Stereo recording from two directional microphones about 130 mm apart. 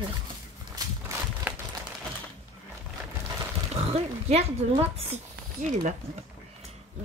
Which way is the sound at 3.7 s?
55° right (ahead or behind).